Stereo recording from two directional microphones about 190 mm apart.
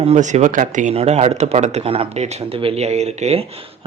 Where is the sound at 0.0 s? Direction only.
35° right (ahead or behind).